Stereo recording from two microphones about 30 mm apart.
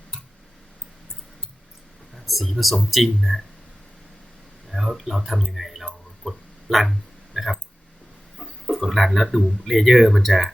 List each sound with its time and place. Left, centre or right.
2.1 s speech: centre
4.7 s speech: centre
6.3 s speech: centre
6.7 s speech: centre
7.3 s a sound: centre
8.6 s speech: centre
9.8 s speech: centre